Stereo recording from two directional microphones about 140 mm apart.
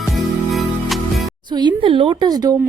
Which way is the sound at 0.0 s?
Centre (ahead or behind).